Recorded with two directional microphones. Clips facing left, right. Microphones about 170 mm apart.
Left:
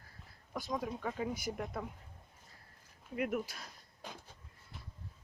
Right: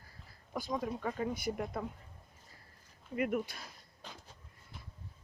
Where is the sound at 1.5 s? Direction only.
Centre (ahead or behind).